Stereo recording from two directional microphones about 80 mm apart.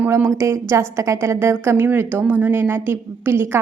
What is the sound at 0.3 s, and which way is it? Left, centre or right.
A woman's voice, right.